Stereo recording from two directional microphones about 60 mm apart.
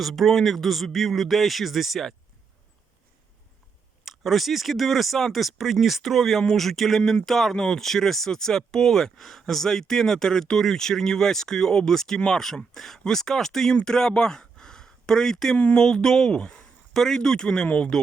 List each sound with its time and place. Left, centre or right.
0.0 s speech: centre
4.0 s speech: centre